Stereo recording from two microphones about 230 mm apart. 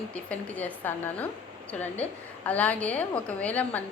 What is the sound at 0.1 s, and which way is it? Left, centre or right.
A woman's voice, centre.